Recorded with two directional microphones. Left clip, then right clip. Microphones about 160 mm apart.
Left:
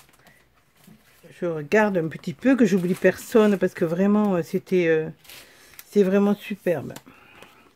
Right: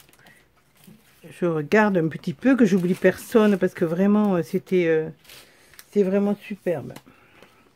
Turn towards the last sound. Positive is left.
turn(degrees=20)  # may be behind; listen again after turning